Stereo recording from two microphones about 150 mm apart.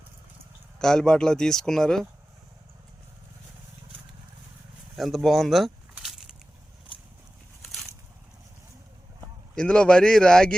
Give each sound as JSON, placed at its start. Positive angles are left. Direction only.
{"t": 0.8, "sound": "speech", "side_deg": 5}
{"t": 4.9, "sound": "speech", "side_deg": 0}
{"t": 5.9, "sound": "a sound", "side_deg": -5}
{"t": 9.6, "sound": "speech", "side_deg": 5}